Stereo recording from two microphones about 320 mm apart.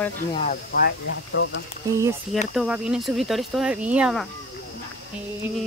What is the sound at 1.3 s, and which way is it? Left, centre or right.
Speech, left.